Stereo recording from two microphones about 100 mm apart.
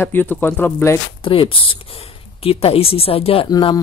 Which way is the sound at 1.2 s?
65° left (ahead or behind).